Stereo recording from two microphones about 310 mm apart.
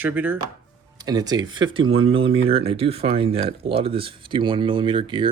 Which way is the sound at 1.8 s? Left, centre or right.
Right.